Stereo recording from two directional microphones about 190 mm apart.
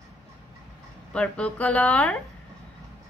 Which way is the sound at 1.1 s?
5° left (ahead or behind).